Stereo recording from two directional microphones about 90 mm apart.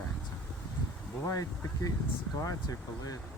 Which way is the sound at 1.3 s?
40° left (ahead or behind).